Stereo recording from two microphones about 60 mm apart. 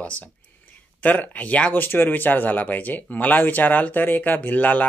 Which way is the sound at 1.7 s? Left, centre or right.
Left.